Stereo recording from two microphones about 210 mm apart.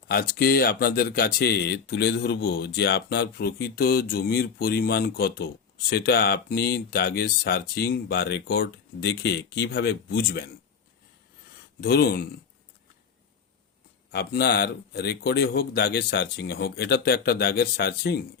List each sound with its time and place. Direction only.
0.1 s speech: 45° left (ahead or behind)
11.8 s speech: 50° left (ahead or behind)
14.1 s speech: 50° left (ahead or behind)